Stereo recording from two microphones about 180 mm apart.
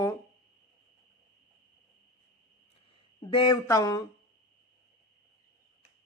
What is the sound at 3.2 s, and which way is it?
Speech, 30° left (ahead or behind).